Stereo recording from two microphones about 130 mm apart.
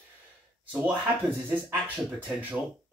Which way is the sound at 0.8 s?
15° right (ahead or behind).